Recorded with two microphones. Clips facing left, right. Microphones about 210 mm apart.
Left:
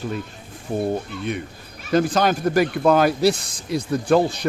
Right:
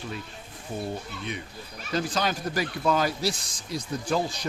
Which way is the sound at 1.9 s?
55° left (ahead or behind).